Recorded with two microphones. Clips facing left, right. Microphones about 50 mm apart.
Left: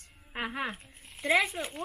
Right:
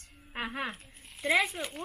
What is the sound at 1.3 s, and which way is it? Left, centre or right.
Speech, centre.